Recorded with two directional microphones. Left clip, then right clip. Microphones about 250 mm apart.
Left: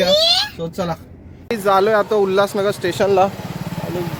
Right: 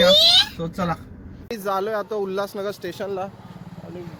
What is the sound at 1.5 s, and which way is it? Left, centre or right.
Speech, centre.